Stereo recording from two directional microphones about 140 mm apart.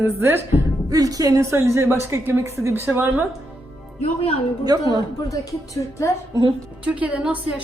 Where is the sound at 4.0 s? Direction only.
40° left (ahead or behind).